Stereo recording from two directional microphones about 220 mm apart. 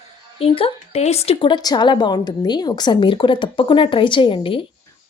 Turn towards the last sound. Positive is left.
turn(degrees=25)  # may be behind; listen again after turning